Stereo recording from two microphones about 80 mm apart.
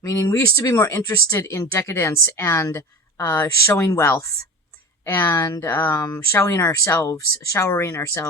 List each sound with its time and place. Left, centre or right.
0.0 s speech: left
0.7 s speech: left